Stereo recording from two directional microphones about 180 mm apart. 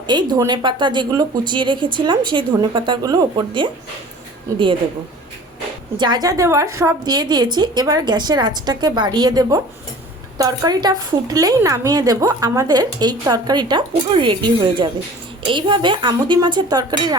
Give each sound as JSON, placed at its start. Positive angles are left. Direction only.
{"t": 0.1, "sound": "a woman's voice", "side_deg": -25}
{"t": 6.0, "sound": "a woman's voice", "side_deg": -20}